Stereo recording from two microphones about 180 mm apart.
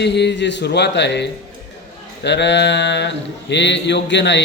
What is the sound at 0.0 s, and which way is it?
A man's voice, 70° left (ahead or behind).